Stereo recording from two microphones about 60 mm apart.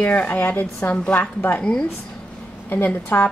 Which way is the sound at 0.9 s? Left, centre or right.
Centre.